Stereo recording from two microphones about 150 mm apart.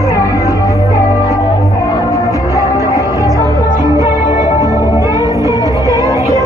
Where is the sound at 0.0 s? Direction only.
20° left (ahead or behind).